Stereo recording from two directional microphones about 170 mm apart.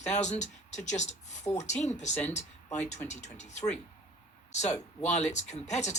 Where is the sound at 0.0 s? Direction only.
45° left (ahead or behind).